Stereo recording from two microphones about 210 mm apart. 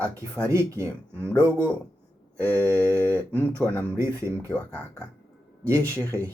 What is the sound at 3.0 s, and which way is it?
Speech, 10° left (ahead or behind).